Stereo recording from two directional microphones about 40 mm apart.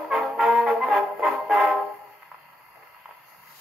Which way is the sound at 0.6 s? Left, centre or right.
Centre.